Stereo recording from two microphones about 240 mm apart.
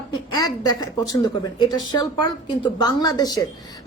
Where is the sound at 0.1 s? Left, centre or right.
Centre.